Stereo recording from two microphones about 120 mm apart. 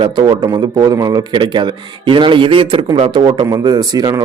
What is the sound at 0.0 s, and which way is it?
Speech, 40° right (ahead or behind).